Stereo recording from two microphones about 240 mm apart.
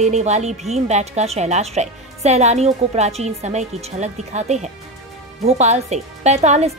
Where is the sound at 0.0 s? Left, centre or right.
Right.